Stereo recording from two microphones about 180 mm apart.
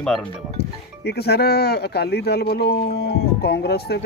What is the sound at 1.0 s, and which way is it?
Speech, 65° left (ahead or behind).